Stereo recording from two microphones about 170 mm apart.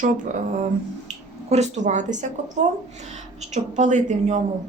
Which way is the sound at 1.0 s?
40° right (ahead or behind).